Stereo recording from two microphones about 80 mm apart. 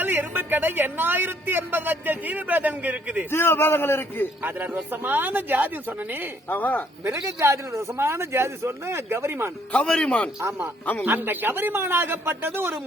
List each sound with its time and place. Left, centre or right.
0.0 s a man's voice: right
3.3 s a man's voice: left
4.4 s a man's voice: right
6.5 s a man's voice: left
7.3 s speech: right
9.7 s a man's voice: centre
11.0 s a man's voice: right